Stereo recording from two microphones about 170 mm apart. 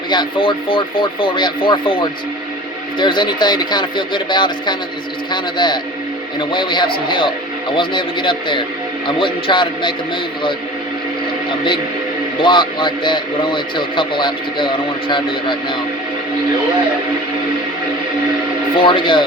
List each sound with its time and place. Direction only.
0.1 s a man's voice: 30° left (ahead or behind)
12.4 s a man's voice: 30° left (ahead or behind)
18.8 s a man's voice: 30° left (ahead or behind)